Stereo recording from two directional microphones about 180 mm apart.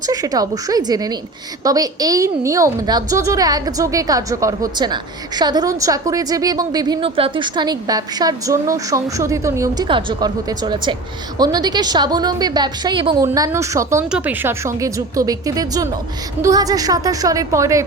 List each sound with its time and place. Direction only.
0.0 s a woman's voice: 20° right (ahead or behind)
13.2 s a woman's voice: 15° right (ahead or behind)